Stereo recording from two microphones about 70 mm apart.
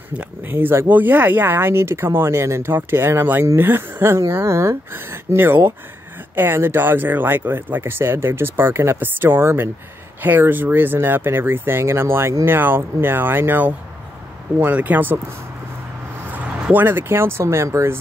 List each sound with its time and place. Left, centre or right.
0.1 s speech: right
16.7 s speech: right